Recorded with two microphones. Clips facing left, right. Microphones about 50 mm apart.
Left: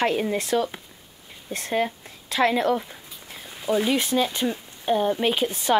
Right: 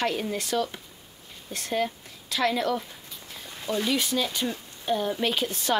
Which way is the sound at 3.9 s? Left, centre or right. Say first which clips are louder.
Left 4 dB; left.